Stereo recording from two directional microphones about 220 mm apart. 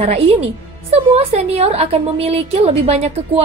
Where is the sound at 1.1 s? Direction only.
30° right (ahead or behind).